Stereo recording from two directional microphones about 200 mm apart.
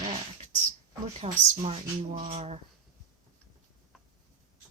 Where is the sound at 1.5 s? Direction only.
30° right (ahead or behind).